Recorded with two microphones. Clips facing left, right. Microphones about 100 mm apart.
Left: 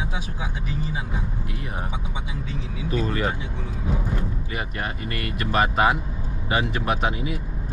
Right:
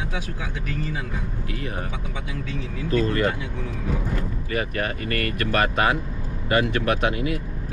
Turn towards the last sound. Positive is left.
turn(degrees=-65)  # may be behind; listen again after turning